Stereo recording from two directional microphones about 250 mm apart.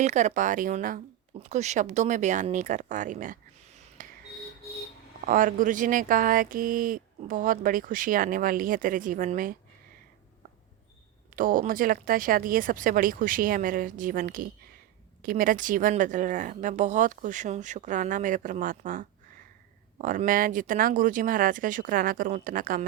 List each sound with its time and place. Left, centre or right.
0.0 s speech: right
5.2 s speech: right
11.3 s speech: right